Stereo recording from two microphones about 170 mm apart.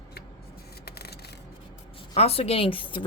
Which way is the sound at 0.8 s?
70° left (ahead or behind).